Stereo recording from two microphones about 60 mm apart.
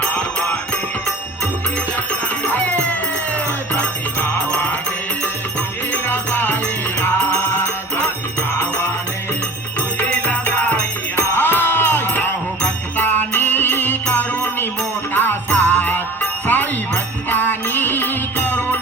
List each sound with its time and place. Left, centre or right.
0.0 s music: left
2.4 s music: left
5.9 s music: left
10.2 s music: left